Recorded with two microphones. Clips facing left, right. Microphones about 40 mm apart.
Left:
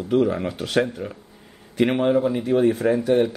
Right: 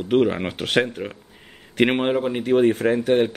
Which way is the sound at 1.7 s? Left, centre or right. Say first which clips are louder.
Even; right.